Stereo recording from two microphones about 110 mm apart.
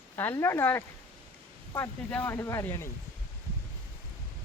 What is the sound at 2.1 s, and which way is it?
Speech, 20° left (ahead or behind).